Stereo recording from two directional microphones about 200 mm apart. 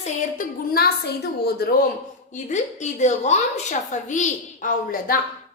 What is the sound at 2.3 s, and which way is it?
A woman's voice, 35° left (ahead or behind).